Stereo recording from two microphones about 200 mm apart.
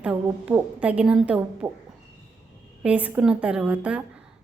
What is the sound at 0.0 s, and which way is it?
A woman's voice, 5° right (ahead or behind).